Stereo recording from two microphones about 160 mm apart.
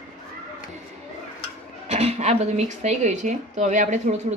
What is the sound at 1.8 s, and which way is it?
Speech, 40° right (ahead or behind).